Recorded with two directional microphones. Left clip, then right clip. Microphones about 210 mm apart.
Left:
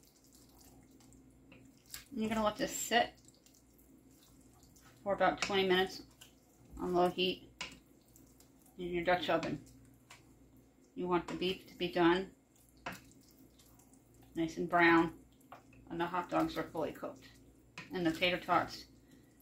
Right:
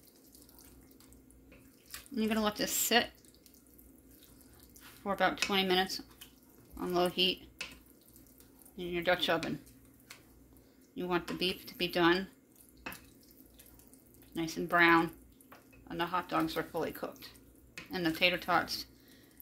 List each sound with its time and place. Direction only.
2.1 s speech: 60° right (ahead or behind)
5.0 s speech: 60° right (ahead or behind)
6.9 s speech: 60° right (ahead or behind)
8.7 s speech: 60° right (ahead or behind)
11.0 s speech: 65° right (ahead or behind)
14.3 s speech: 60° right (ahead or behind)
16.0 s speech: 60° right (ahead or behind)